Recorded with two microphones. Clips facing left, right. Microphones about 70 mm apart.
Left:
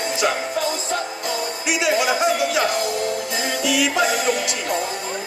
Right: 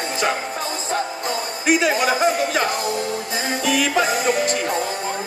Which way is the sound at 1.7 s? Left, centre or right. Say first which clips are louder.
Right 2 dB; right.